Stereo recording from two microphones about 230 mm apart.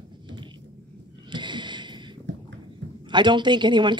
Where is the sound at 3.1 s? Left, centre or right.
Centre.